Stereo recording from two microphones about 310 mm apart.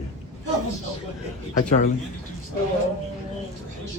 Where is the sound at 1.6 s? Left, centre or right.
Left.